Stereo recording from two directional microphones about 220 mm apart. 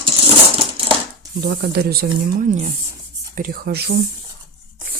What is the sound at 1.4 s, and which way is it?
Speech, 45° right (ahead or behind).